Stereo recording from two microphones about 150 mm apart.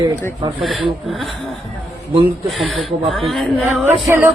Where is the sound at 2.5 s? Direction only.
Centre (ahead or behind).